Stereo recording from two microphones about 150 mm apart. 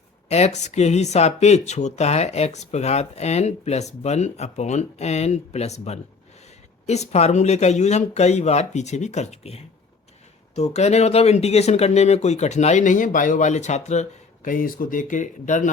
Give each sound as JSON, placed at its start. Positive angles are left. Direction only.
{"t": 0.3, "sound": "speech", "side_deg": 45}